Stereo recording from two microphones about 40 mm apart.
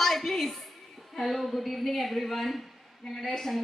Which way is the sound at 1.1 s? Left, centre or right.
Centre.